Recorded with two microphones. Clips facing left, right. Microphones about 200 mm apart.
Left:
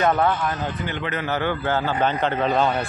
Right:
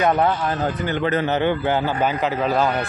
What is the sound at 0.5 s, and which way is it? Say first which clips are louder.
Speech: right 4 dB; 35° right (ahead or behind).